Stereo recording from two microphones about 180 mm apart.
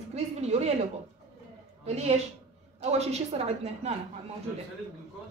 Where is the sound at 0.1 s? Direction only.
35° right (ahead or behind).